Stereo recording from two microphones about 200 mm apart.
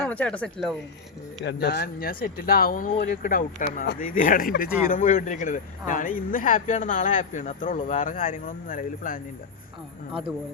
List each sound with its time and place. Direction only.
0.0 s speech: 5° left (ahead or behind)
1.5 s speech: 55° left (ahead or behind)